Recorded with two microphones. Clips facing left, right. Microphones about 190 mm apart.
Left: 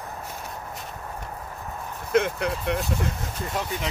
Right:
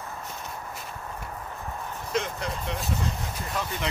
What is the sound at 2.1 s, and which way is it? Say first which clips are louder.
Speech: left 7 dB; 60° left (ahead or behind).